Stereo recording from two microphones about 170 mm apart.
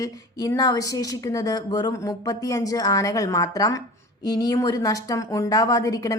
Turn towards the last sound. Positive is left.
turn(degrees=20)  # may be behind; listen again after turning